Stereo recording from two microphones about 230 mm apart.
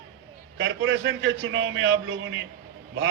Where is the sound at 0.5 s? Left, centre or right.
Right.